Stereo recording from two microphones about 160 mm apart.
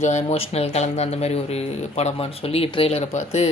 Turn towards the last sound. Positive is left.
turn(degrees=40)  # may be behind; listen again after turning